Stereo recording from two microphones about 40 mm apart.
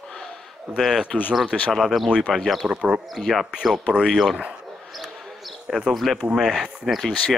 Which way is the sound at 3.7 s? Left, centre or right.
Right.